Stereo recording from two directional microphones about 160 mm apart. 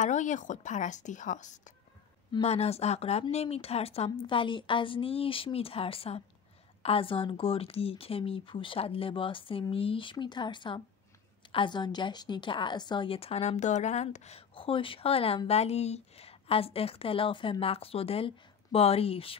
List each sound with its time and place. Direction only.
0.0 s a woman's voice: 50° left (ahead or behind)